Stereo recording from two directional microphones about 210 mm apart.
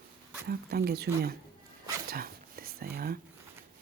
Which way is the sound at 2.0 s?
45° right (ahead or behind).